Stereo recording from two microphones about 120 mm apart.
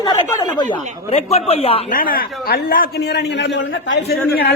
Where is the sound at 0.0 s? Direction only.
35° left (ahead or behind).